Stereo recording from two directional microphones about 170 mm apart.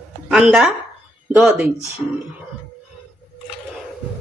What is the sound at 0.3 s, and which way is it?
Speech, 5° right (ahead or behind).